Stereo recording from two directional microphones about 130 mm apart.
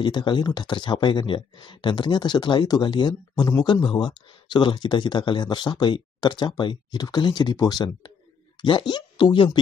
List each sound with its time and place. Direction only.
0.0 s speech: 35° left (ahead or behind)